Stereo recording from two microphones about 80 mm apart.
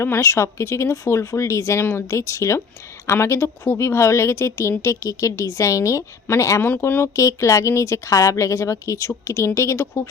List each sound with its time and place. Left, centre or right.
0.0 s speech: left
6.6 s speech: left
7.0 s speech: left